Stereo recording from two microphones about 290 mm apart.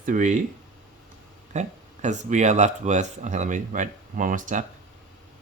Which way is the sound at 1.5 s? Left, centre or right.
Right.